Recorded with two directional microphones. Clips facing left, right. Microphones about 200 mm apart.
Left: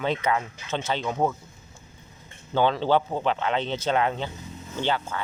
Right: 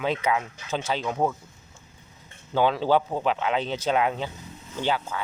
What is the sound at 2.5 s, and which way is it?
Speech, 5° right (ahead or behind).